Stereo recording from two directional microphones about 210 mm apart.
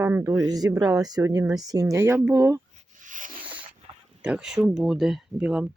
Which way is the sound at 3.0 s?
40° right (ahead or behind).